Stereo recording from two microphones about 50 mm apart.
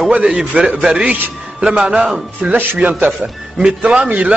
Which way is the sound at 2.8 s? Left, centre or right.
Right.